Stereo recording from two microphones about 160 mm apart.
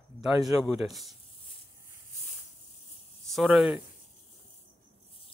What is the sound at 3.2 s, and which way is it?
Speech, centre (ahead or behind).